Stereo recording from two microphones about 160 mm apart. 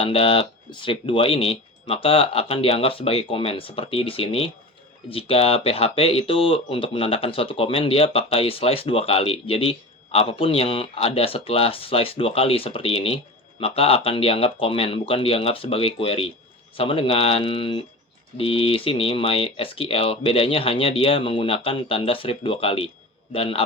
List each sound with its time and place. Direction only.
0.0 s speech: 35° left (ahead or behind)